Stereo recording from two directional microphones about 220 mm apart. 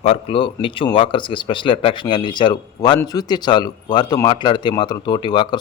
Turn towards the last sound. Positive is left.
turn(degrees=20)  # may be behind; listen again after turning